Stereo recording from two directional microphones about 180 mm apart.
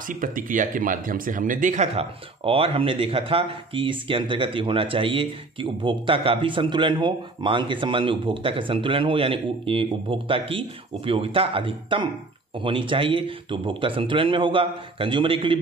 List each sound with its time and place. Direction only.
0.0 s speech: 50° right (ahead or behind); by 15.5 s 30° right (ahead or behind)